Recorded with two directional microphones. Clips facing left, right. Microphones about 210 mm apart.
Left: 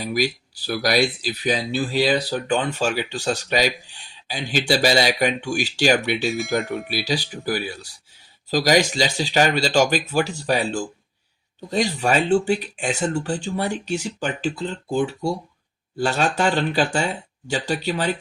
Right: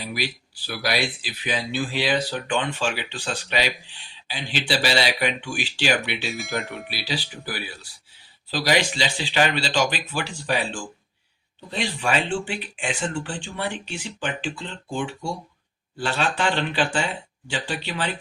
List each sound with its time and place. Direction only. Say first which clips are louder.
0.0 s speech: left 7 dB; 40° left (ahead or behind)
6.3 s speech: left 6 dB; centre (ahead or behind)
6.9 s speech: left 4 dB; 45° left (ahead or behind)